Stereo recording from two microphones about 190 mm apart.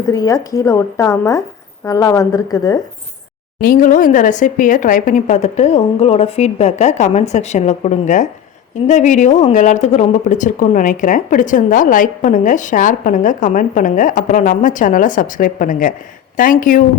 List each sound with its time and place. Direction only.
0.0 s speech: 15° left (ahead or behind)
3.6 s a woman's voice: 50° left (ahead or behind)